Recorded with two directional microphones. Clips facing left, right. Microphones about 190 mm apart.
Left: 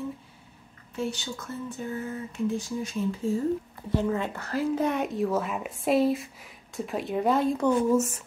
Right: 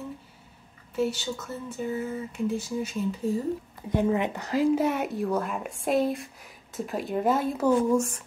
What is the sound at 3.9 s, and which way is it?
Speech, 15° right (ahead or behind).